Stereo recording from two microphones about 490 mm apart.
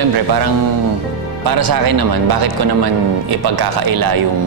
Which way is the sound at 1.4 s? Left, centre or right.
Right.